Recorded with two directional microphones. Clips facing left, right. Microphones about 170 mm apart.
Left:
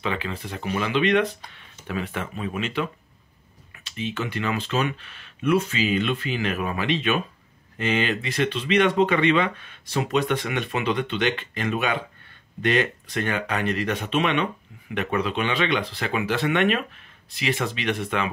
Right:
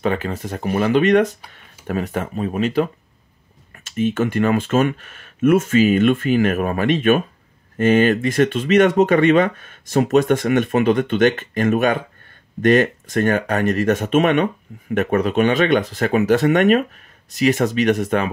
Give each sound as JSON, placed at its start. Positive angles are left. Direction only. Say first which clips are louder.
{"t": 0.0, "sound": "speech", "louder": "right 7 dB", "side_deg": -45}